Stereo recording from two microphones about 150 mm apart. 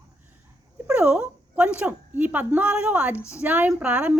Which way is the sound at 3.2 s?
20° left (ahead or behind).